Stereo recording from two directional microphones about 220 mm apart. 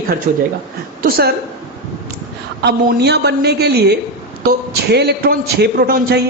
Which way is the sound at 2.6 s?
50° right (ahead or behind).